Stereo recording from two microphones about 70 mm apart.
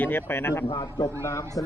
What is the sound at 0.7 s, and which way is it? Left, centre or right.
Speech, left.